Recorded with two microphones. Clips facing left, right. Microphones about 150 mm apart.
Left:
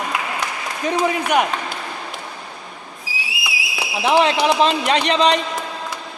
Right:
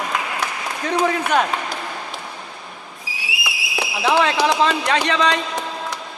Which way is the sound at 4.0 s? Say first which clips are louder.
Left 2 dB; 20° left (ahead or behind).